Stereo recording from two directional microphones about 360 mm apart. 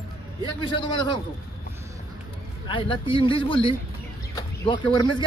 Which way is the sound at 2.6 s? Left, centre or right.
Centre.